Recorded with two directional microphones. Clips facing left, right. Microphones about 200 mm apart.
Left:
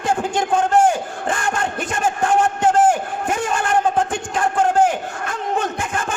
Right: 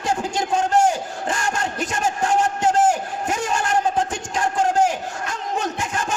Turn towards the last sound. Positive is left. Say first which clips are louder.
# left 2 dB
turn(degrees=55)  # may be behind; listen again after turning